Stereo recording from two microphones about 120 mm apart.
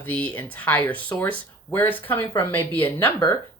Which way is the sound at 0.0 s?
15° left (ahead or behind).